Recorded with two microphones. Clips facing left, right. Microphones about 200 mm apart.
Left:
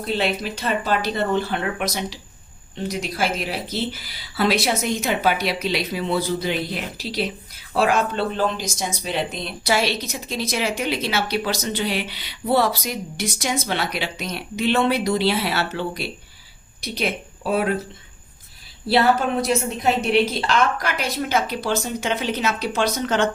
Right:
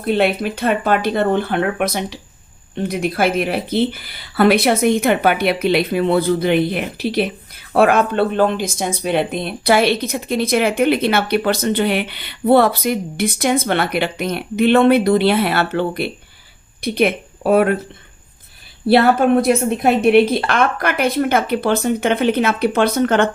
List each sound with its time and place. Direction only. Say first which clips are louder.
0.0 s speech: right 7 dB; 55° right (ahead or behind)
18.9 s speech: right 6 dB; 55° right (ahead or behind)